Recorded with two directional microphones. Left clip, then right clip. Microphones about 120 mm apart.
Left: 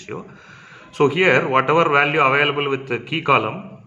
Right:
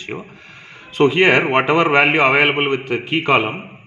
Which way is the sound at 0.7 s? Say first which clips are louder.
Right 2 dB; 20° right (ahead or behind).